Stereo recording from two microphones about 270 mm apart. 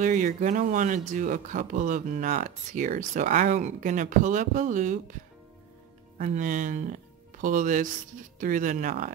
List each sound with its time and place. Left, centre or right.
0.0 s speech: right
6.1 s speech: right